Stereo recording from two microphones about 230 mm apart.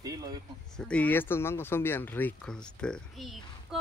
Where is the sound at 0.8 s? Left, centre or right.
Centre.